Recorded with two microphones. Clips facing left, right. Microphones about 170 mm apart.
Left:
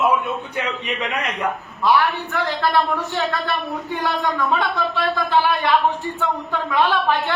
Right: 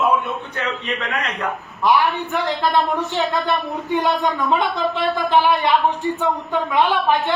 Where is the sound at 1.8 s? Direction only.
15° right (ahead or behind).